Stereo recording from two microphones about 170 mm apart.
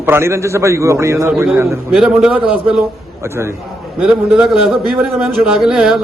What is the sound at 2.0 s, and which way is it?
A man's voice, 5° right (ahead or behind).